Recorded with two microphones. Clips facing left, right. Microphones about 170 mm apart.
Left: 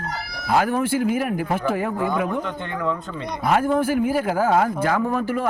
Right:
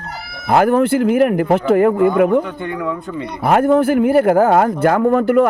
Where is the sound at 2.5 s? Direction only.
10° right (ahead or behind).